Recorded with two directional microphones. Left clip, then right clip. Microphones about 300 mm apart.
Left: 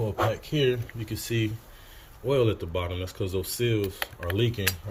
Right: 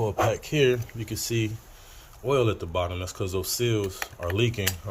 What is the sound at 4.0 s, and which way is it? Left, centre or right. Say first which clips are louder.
Speech: right 1 dB; centre.